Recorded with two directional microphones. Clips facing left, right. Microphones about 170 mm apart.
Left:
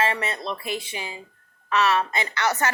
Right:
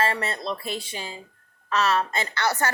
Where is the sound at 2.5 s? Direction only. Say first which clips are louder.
Left 1 dB; 35° right (ahead or behind).